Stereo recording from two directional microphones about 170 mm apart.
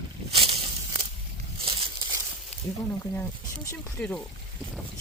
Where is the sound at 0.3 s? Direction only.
35° right (ahead or behind).